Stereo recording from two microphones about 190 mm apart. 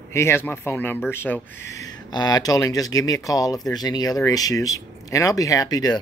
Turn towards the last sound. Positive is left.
turn(degrees=20)  # may be behind; listen again after turning